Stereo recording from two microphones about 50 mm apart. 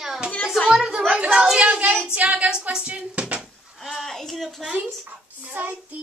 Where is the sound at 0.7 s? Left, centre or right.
Centre.